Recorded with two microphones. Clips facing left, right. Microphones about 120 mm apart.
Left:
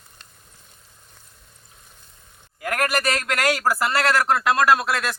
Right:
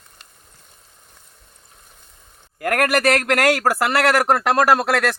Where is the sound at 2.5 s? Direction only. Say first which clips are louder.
Right 5 dB; 60° right (ahead or behind).